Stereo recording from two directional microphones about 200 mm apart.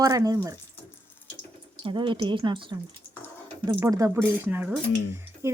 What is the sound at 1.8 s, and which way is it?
A woman's voice, 25° right (ahead or behind).